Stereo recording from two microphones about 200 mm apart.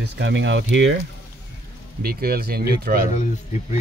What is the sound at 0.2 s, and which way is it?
Speech, 65° right (ahead or behind).